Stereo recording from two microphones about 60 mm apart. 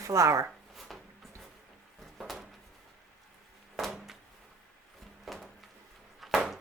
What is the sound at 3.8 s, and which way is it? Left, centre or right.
Door, centre.